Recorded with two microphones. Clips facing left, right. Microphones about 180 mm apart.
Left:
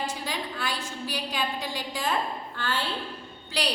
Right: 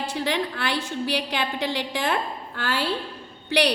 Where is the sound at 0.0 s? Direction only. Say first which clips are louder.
Right 6 dB; 70° right (ahead or behind).